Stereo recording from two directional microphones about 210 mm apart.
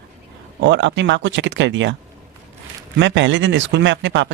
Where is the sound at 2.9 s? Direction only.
60° right (ahead or behind).